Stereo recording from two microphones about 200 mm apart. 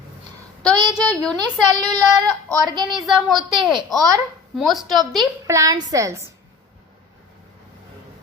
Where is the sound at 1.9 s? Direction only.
20° right (ahead or behind).